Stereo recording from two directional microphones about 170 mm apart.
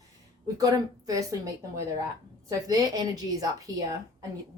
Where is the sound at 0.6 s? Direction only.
20° right (ahead or behind).